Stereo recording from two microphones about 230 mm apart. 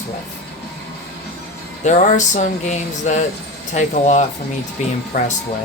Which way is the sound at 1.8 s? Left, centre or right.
Left.